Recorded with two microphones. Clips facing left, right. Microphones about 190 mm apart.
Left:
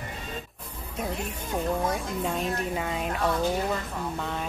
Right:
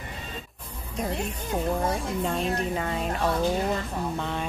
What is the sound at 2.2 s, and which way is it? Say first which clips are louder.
Speech: right 2 dB; 5° left (ahead or behind).